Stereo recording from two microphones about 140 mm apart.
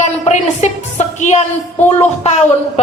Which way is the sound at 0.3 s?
55° left (ahead or behind).